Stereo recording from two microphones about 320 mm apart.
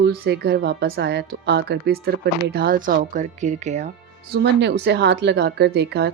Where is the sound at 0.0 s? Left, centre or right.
Right.